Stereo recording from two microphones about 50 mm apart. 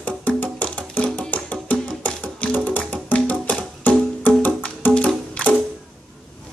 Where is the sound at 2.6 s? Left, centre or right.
Left.